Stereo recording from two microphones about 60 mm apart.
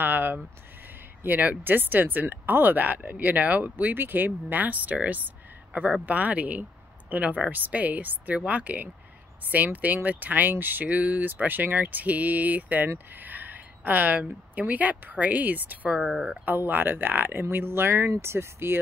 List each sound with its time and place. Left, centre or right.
0.0 s a sound: right
1.2 s speech: right
16.0 s speech: centre
16.4 s speech: right